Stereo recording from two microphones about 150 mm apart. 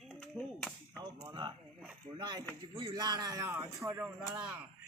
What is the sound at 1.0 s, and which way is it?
Speech, 25° right (ahead or behind).